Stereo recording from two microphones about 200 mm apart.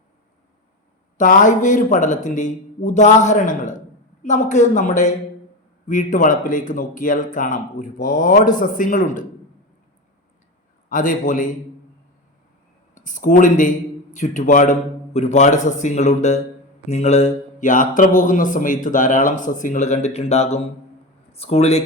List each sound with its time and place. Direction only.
1.2 s a man's voice: 40° left (ahead or behind)
10.8 s a man's voice: 40° left (ahead or behind)
12.9 s a man's voice: 40° left (ahead or behind)